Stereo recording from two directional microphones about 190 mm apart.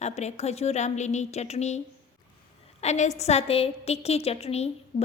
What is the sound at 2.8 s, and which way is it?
A woman's voice, 35° left (ahead or behind).